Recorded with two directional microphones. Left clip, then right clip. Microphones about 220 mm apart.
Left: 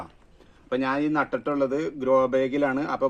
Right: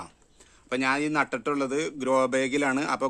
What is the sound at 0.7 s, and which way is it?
Speech, 35° right (ahead or behind).